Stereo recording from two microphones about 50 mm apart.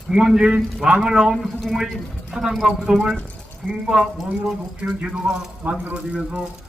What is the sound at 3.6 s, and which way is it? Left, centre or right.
A man's voice, centre.